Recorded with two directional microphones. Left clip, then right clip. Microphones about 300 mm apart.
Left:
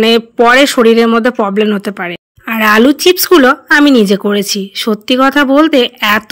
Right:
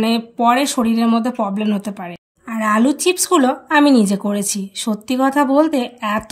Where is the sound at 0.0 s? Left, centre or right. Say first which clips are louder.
Left 9 dB; centre.